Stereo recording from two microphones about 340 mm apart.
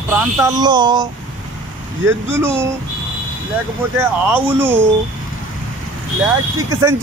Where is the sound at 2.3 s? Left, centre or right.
Centre.